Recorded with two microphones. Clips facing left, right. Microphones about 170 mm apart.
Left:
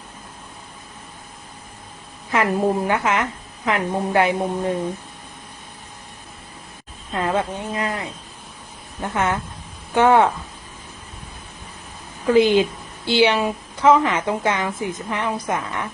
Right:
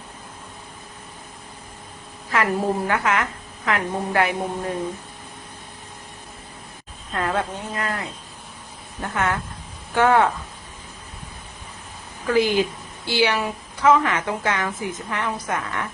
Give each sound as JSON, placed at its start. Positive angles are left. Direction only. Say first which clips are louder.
{"t": 2.3, "sound": "a woman's voice", "louder": "left 3 dB", "side_deg": 20}
{"t": 7.1, "sound": "a woman's voice", "louder": "left 2 dB", "side_deg": 20}
{"t": 12.3, "sound": "a woman's voice", "louder": "left 4 dB", "side_deg": 20}